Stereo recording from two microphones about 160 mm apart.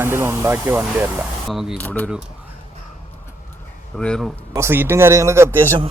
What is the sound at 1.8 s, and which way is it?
Speech, 10° left (ahead or behind).